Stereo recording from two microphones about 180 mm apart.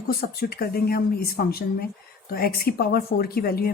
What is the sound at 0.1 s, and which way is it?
Speech, 60° left (ahead or behind).